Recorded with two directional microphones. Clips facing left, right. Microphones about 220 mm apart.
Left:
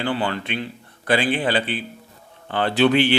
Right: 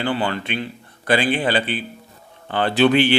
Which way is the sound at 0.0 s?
15° right (ahead or behind).